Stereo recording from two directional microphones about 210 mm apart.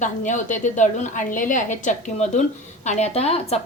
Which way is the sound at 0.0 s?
35° left (ahead or behind).